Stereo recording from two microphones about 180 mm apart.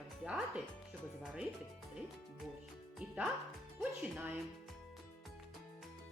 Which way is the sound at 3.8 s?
10° right (ahead or behind).